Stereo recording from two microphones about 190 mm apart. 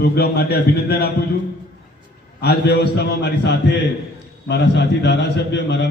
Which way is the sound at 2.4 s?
60° left (ahead or behind).